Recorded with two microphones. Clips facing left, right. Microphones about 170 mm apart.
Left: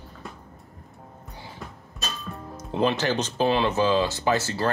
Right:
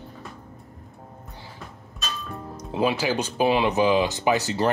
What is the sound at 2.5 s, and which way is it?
Speech, 5° right (ahead or behind).